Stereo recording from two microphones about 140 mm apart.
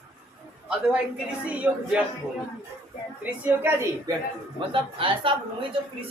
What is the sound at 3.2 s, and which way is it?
Speech, 20° right (ahead or behind).